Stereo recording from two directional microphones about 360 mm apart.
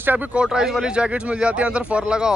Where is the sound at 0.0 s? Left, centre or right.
Centre.